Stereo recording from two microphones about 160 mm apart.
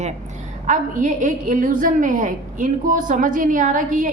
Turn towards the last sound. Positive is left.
turn(degrees=-55)  # may be behind; listen again after turning